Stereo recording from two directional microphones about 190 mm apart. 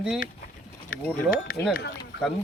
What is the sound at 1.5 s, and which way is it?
Speech, 50° left (ahead or behind).